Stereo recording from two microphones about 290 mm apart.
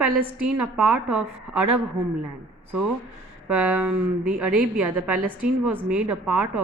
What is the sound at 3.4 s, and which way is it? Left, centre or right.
A woman's voice, centre.